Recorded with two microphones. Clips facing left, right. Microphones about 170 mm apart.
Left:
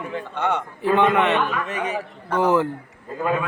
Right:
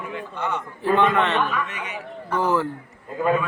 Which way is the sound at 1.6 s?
35° left (ahead or behind).